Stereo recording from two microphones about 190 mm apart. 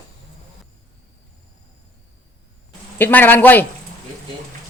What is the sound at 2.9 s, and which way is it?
Speech, 10° left (ahead or behind).